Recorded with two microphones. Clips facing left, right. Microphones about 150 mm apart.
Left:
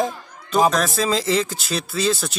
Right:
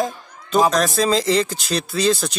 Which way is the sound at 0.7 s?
Centre (ahead or behind).